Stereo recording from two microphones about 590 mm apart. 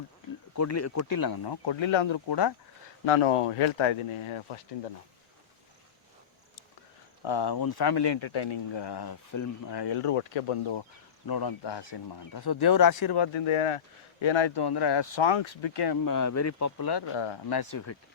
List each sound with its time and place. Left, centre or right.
0.5 s speech: left
3.1 s speech: left
7.2 s speech: left
11.3 s speech: left